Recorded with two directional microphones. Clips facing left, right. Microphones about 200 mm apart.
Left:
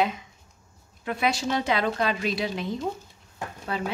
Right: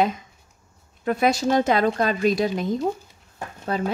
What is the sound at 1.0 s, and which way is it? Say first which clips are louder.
A woman's voice: right 6 dB; 45° right (ahead or behind).